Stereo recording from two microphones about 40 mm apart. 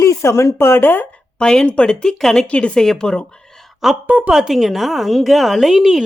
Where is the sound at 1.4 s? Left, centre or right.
Left.